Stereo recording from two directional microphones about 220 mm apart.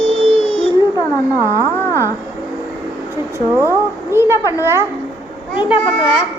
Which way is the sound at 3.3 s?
10° right (ahead or behind).